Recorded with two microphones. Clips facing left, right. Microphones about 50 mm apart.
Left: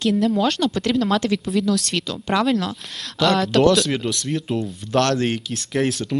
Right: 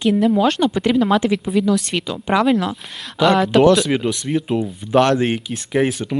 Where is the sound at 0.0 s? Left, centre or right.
Centre.